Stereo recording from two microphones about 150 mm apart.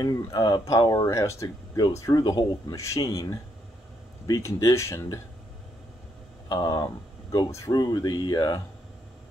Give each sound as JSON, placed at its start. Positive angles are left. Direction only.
{"t": 0.0, "sound": "speech", "side_deg": 25}
{"t": 6.5, "sound": "speech", "side_deg": 25}